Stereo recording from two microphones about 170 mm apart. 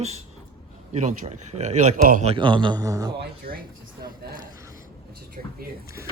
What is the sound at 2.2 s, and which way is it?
Speech, 30° right (ahead or behind).